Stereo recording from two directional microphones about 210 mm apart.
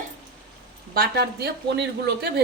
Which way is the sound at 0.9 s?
45° right (ahead or behind).